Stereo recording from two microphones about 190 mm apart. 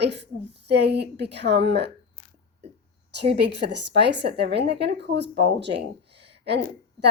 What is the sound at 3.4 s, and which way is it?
Speech, 65° right (ahead or behind).